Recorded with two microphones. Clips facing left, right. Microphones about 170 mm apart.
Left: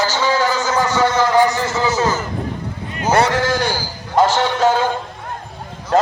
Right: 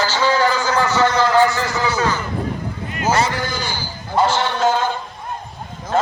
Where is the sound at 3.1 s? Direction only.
80° left.